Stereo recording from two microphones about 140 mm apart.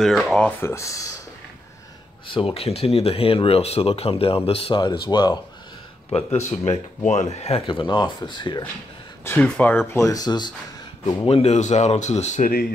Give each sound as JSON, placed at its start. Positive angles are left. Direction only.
{"t": 0.0, "sound": "speech", "side_deg": 0}
{"t": 2.2, "sound": "speech", "side_deg": 40}
{"t": 6.5, "sound": "speech", "side_deg": 45}
{"t": 9.2, "sound": "speech", "side_deg": 10}
{"t": 9.9, "sound": "speech", "side_deg": 25}
{"t": 11.2, "sound": "speech", "side_deg": 50}